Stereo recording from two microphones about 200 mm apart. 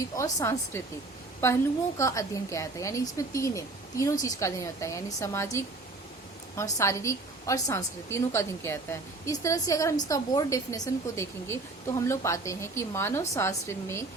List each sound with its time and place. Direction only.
0.0 s a woman's voice: 15° left (ahead or behind)
2.0 s a woman's voice: 15° left (ahead or behind)
6.7 s a woman's voice: 15° left (ahead or behind)